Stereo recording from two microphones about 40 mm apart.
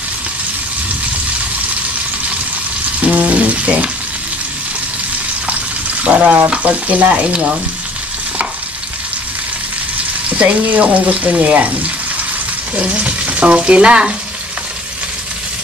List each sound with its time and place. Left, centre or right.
3.0 s frying: right
6.0 s speech: right
10.3 s speech: right
11.3 s frying: right
12.7 s frying: right